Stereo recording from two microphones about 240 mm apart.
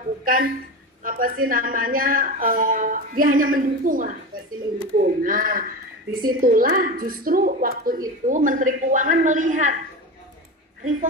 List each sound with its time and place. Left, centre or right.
0.2 s a sound: right
1.0 s a woman's voice: right
10.8 s speech: right